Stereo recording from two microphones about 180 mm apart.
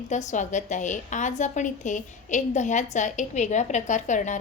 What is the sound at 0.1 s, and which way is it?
A woman's voice, 40° left (ahead or behind).